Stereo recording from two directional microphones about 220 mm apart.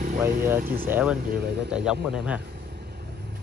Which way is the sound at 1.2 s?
40° right (ahead or behind).